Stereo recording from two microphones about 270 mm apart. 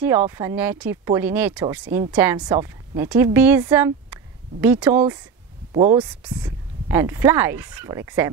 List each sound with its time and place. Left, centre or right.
0.0 s speech: centre